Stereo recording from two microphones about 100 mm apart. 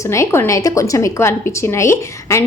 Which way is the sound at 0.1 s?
30° left (ahead or behind).